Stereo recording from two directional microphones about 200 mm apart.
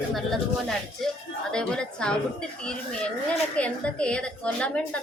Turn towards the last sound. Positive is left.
turn(degrees=5)  # may be behind; listen again after turning